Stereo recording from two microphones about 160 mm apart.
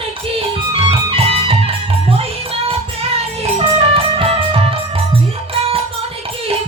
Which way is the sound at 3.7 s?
35° right (ahead or behind).